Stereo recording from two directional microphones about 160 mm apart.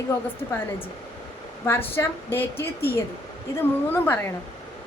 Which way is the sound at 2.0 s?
15° left (ahead or behind).